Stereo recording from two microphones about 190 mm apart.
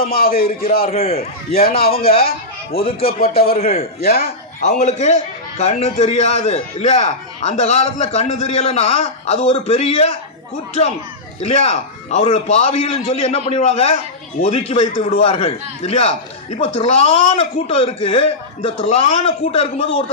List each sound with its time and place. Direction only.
0.0 s a man's voice: 50° left (ahead or behind)
0.9 s a man's voice: 30° left (ahead or behind)
1.7 s a man's voice: 50° left (ahead or behind)
2.7 s speech: 30° left (ahead or behind)
3.3 s a man's voice: 50° left (ahead or behind); by 10.2 s 35° left (ahead or behind)
11.3 s a man's voice: 35° left (ahead or behind)